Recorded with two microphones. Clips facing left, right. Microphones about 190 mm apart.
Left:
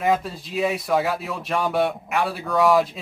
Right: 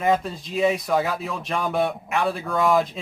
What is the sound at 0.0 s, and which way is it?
Speech, centre (ahead or behind).